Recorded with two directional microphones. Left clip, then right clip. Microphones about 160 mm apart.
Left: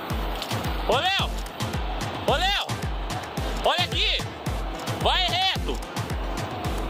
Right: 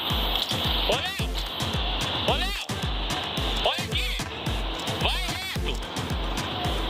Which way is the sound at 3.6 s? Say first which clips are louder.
Left 7 dB; 40° left (ahead or behind).